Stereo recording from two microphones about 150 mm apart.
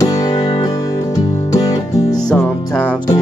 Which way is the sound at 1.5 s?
25° left (ahead or behind).